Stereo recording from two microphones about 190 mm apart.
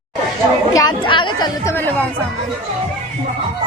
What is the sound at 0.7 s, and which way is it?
A woman's voice, 20° left (ahead or behind).